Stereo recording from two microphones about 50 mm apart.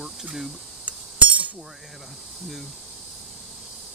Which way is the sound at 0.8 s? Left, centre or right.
Right.